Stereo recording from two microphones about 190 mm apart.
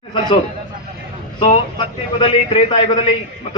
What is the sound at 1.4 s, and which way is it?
A man's voice, 30° left (ahead or behind).